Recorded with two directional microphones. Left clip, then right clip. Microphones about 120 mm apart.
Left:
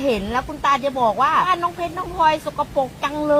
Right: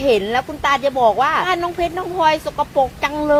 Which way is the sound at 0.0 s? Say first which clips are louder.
Right 5 dB; 65° right (ahead or behind).